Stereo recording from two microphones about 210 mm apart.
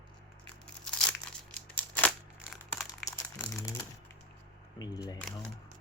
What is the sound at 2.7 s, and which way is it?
Crumpling, 15° left (ahead or behind).